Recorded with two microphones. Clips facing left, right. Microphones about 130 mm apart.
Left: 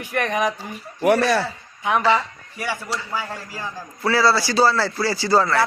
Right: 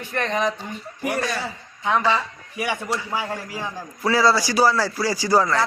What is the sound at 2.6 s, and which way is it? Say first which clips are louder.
A man's voice: right 2 dB; 15° right (ahead or behind).